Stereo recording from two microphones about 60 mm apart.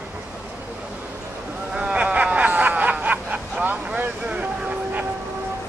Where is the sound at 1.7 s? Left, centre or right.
Centre.